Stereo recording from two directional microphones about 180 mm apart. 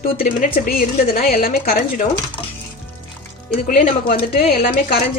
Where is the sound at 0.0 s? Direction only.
55° left (ahead or behind).